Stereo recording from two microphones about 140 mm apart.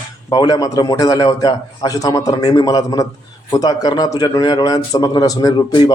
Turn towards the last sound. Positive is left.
turn(degrees=30)  # may be behind; listen again after turning